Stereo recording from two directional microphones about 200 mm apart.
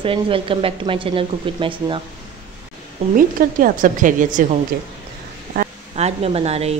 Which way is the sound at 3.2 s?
45° right (ahead or behind).